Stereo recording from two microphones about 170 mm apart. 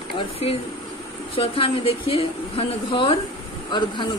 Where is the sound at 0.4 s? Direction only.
35° left (ahead or behind).